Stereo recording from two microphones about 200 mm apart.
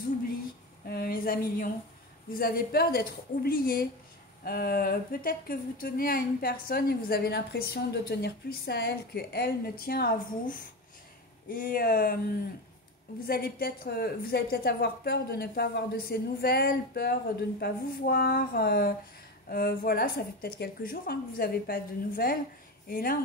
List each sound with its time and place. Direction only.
0.8 s a sound: 50° left (ahead or behind)
2.3 s speech: 50° left (ahead or behind)
13.3 s speech: 50° left (ahead or behind)